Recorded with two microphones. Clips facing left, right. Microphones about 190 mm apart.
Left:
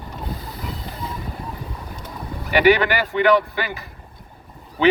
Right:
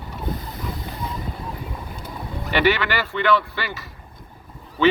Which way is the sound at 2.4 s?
15° left (ahead or behind).